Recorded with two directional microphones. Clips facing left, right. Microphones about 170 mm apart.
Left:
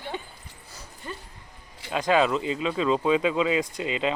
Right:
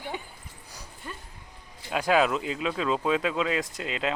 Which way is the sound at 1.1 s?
Centre (ahead or behind).